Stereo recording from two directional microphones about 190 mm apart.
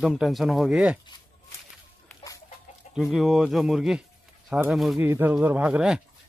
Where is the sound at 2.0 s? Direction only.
15° left (ahead or behind).